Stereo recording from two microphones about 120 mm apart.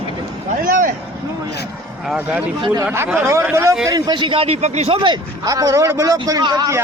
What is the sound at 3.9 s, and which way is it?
Speech, 35° right (ahead or behind).